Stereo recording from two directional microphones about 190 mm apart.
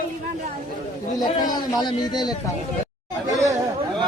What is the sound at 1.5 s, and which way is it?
Speech, 20° left (ahead or behind).